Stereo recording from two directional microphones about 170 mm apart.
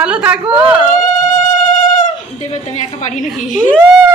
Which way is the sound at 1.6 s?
50° left (ahead or behind).